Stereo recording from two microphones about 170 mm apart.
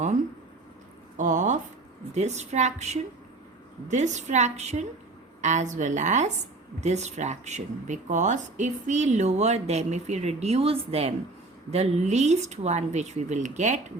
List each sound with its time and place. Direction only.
1.1 s a woman's voice: 50° right (ahead or behind)